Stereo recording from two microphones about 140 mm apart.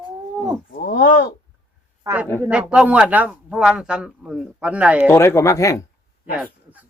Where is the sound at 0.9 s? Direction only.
85° left.